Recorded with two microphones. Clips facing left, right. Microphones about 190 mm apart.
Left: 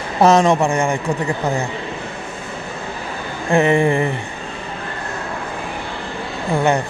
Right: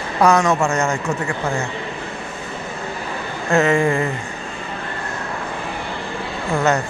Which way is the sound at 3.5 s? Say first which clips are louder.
Left 2 dB; 15° left (ahead or behind).